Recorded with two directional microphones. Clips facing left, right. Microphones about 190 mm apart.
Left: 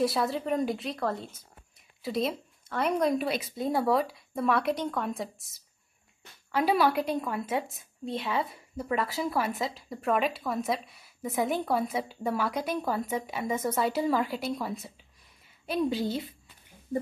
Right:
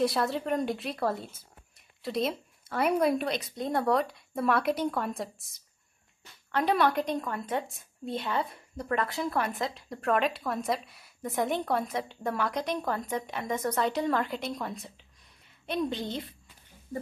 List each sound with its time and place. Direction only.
0.0 s a woman's voice: centre (ahead or behind)
3.3 s a woman's voice: 5° left (ahead or behind)